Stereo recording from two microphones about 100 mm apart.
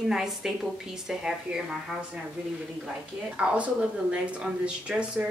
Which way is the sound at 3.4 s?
10° right (ahead or behind).